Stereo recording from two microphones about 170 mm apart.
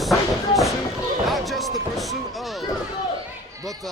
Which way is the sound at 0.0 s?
Centre (ahead or behind).